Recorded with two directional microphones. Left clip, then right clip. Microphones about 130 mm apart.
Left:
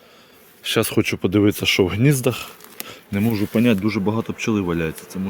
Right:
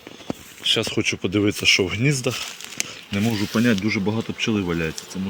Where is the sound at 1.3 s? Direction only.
55° left (ahead or behind).